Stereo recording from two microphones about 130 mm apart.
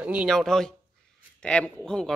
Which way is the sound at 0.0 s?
10° right (ahead or behind).